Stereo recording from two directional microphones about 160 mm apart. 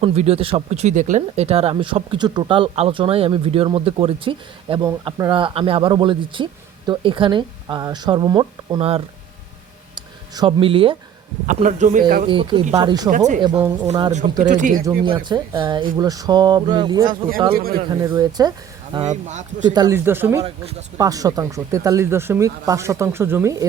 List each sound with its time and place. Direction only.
0.0 s speech: 40° right (ahead or behind)
9.9 s a sound: 30° right (ahead or behind)
11.4 s speech: 50° right (ahead or behind)
12.3 s speech: 30° right (ahead or behind)
13.1 s speech: 50° right (ahead or behind)
13.4 s speech: 30° right (ahead or behind)
14.4 s speech: 50° right (ahead or behind)
15.0 s speech: 30° right (ahead or behind)
17.5 s speech: 70° right (ahead or behind)
17.8 s speech: 25° right (ahead or behind)
19.0 s speech: 45° right (ahead or behind)
19.6 s speech: 25° right (ahead or behind)
20.1 s speech: 15° right (ahead or behind)